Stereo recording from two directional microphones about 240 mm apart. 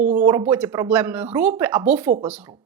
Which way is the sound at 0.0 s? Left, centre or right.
Right.